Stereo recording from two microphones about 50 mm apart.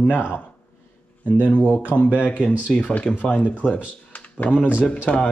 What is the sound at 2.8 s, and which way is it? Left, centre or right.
Speech, left.